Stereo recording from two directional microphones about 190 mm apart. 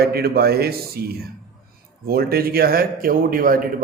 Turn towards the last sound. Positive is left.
turn(degrees=-50)  # may be behind; listen again after turning